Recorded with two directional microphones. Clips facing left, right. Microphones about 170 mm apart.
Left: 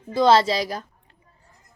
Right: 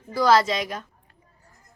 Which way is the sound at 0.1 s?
25° left (ahead or behind).